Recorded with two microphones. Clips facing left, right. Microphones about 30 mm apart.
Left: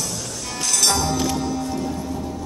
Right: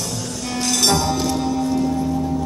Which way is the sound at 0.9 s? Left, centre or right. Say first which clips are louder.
Right 2 dB; centre.